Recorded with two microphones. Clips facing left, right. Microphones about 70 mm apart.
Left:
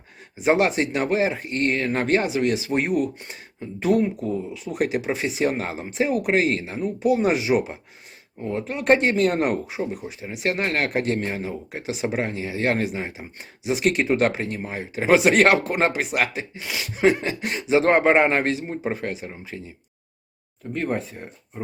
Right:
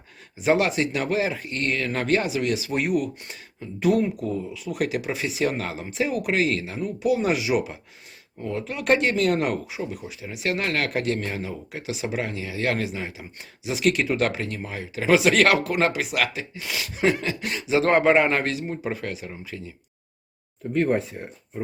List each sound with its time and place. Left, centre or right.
0.4 s speech: left
4.5 s speech: left
16.6 s speech: centre
16.9 s speech: left
20.7 s speech: centre